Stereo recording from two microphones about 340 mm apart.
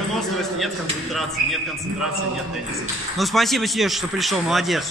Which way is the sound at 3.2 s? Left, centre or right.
Centre.